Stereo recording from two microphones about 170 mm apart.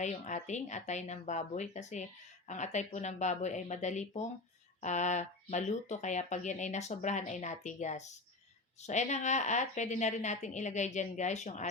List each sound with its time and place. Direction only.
0.0 s speech: 45° left (ahead or behind)